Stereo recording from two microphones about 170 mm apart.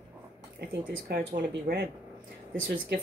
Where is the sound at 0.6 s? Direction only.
75° right (ahead or behind).